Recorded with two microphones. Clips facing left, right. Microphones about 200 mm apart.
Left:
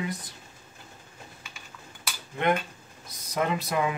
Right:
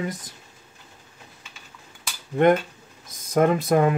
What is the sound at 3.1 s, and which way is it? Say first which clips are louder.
Speech: right 9 dB; 50° right (ahead or behind).